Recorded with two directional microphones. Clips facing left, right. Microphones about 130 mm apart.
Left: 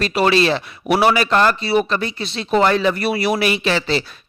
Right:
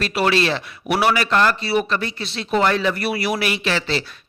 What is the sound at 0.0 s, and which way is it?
A man's voice, 25° left (ahead or behind).